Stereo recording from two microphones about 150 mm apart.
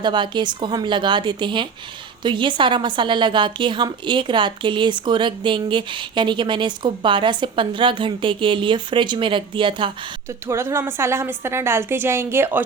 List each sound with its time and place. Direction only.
0.0 s a woman's voice: 30° right (ahead or behind)
10.2 s a woman's voice: 20° right (ahead or behind)